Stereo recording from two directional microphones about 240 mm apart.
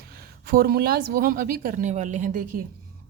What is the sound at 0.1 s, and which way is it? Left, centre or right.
A woman's voice, right.